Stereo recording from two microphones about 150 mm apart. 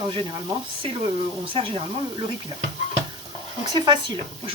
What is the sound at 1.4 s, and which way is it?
Speech, 35° right (ahead or behind).